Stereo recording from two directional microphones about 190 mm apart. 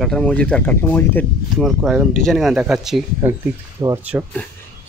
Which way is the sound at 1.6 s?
Centre (ahead or behind).